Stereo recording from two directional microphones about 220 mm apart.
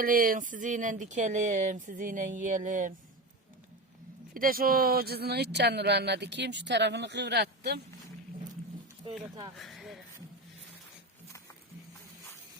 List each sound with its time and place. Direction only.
0.0 s speech: 40° right (ahead or behind)
4.4 s speech: 40° right (ahead or behind)
9.6 s a sound: centre (ahead or behind)